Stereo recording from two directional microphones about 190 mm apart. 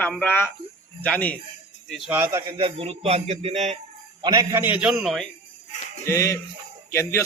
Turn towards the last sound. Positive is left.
turn(degrees=15)  # may be behind; listen again after turning